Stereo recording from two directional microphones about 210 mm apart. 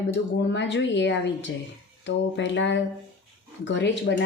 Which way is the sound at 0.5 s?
60° left (ahead or behind).